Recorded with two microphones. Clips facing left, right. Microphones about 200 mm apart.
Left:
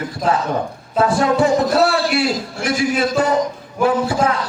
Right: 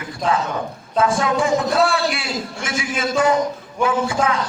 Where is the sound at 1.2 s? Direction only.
40° left (ahead or behind).